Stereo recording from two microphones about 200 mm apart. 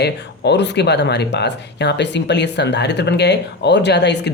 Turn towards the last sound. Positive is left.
turn(degrees=60)  # may be behind; listen again after turning